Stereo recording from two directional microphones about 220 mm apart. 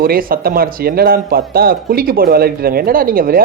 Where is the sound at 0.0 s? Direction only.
40° right (ahead or behind).